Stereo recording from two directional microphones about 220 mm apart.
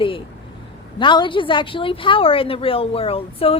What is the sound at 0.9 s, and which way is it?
A woman's voice, 20° left (ahead or behind).